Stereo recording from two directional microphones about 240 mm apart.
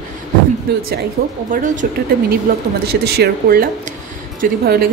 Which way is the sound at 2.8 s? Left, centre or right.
Right.